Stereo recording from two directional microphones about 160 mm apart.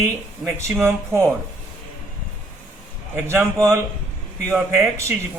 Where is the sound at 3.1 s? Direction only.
15° right (ahead or behind).